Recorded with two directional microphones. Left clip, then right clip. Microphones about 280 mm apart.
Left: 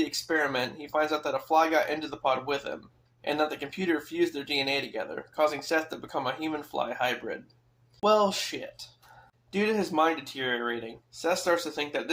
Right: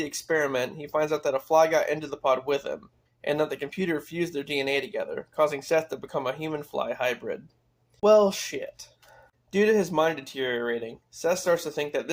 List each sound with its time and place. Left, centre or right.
0.3 s speech: right